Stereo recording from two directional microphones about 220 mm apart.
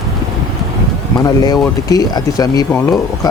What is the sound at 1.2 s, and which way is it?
Speech, 15° left (ahead or behind).